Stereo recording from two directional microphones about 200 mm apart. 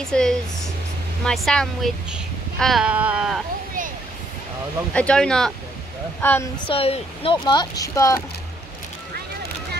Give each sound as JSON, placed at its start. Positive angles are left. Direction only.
{"t": 0.0, "sound": "speech", "side_deg": 5}
{"t": 4.9, "sound": "a woman's voice", "side_deg": 5}
{"t": 6.7, "sound": "speech", "side_deg": 30}